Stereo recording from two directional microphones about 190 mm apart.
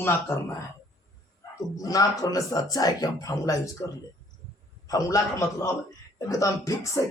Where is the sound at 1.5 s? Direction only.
20° left (ahead or behind).